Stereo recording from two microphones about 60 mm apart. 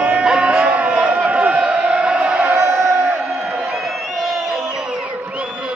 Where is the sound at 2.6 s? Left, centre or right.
Right.